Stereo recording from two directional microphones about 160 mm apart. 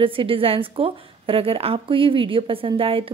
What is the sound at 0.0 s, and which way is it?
A woman's voice, 35° right (ahead or behind).